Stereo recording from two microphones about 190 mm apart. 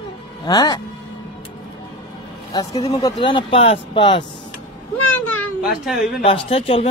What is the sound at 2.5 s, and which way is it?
Speech, 20° left (ahead or behind).